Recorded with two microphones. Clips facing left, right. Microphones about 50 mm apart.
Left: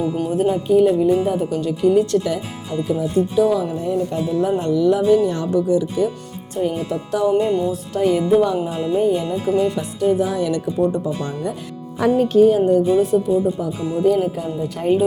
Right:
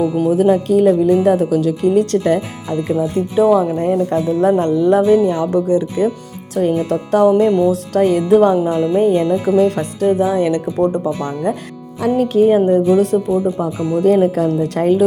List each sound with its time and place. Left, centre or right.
0.4 s speech: right
1.8 s speech: right
3.8 s speech: right
5.1 s speech: right
5.5 s speech: right
7.7 s speech: right
10.2 s speech: right
10.8 s speech: right
12.9 s speech: right
13.2 s speech: right